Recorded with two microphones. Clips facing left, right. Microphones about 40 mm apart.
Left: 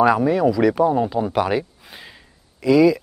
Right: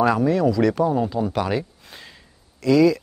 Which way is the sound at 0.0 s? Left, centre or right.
Centre.